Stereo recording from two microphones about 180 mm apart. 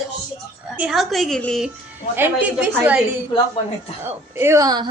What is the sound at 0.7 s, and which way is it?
Speech, centre (ahead or behind).